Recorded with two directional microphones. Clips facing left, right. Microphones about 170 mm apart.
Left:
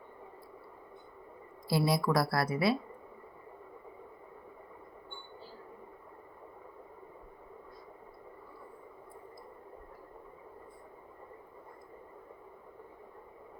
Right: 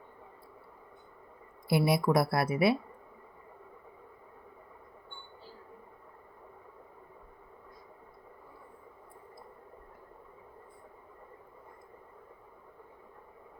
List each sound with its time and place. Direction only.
1.7 s speech: 20° right (ahead or behind)